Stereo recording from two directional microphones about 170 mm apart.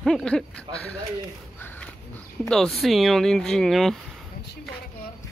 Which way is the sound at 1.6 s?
10° left (ahead or behind).